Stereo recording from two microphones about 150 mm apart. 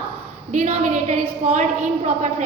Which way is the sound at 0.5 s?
50° right (ahead or behind).